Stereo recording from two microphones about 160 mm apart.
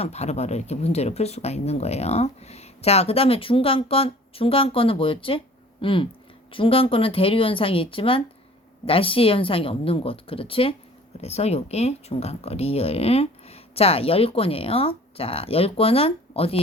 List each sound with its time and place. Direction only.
0.0 s speech: 45° left (ahead or behind)